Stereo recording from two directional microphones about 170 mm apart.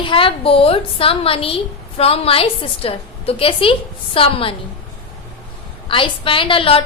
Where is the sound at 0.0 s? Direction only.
30° left (ahead or behind).